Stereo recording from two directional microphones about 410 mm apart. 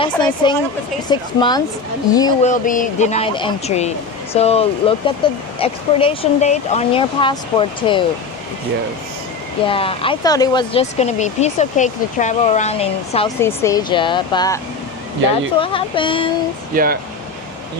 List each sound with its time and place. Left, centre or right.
0.0 s speech: centre
9.6 s speech: centre
15.6 s speech: centre
16.7 s speech: right